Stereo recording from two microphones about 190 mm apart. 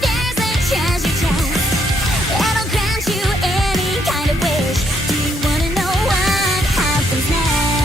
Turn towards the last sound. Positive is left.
turn(degrees=0)  # may be behind; listen again after turning